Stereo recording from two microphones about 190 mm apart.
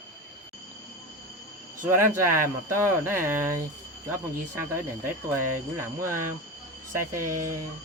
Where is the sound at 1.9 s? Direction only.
15° right (ahead or behind).